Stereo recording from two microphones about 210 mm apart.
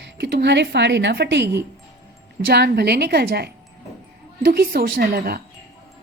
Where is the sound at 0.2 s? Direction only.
50° right (ahead or behind).